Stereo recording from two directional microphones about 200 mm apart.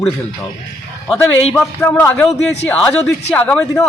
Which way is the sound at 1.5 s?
5° left (ahead or behind).